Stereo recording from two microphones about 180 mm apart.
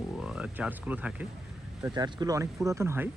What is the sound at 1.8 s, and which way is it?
Speech, 25° right (ahead or behind).